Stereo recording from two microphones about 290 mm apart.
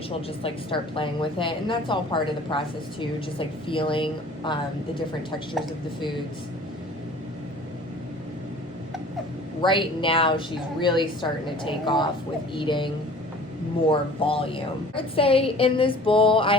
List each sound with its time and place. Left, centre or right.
0.1 s a woman's voice: centre
9.6 s a woman's voice: centre
13.9 s a woman's voice: centre